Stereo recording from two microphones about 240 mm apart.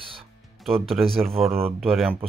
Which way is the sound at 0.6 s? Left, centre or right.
Centre.